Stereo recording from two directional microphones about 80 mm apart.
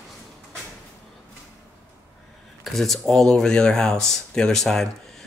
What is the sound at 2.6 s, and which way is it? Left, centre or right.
Speech, centre.